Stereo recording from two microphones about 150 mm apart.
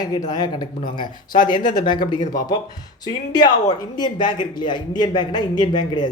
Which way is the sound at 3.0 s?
25° left (ahead or behind).